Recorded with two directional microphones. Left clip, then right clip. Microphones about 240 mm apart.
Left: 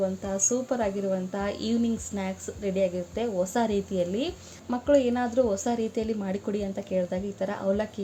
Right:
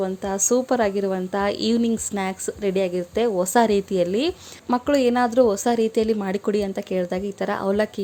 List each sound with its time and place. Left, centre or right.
0.0 s a woman's voice: right